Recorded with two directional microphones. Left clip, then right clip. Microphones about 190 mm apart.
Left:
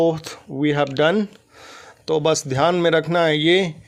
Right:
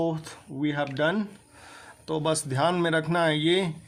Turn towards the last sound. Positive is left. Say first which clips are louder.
# left 7 dB
turn(degrees=35)  # may be behind; listen again after turning